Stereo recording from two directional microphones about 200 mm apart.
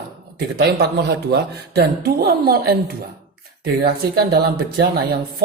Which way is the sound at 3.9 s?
50° right (ahead or behind).